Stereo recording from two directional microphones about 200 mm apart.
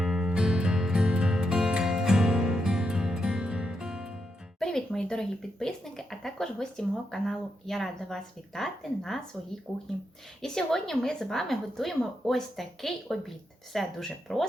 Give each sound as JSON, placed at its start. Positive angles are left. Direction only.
{"t": 0.0, "sound": "music", "side_deg": -5}
{"t": 4.6, "sound": "a woman's voice", "side_deg": 5}